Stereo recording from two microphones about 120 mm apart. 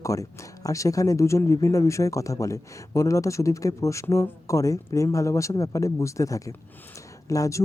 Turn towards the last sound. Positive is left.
turn(degrees=25)  # may be behind; listen again after turning